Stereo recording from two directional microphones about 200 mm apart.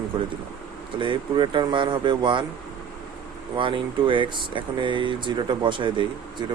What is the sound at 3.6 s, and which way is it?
Speech, 25° right (ahead or behind).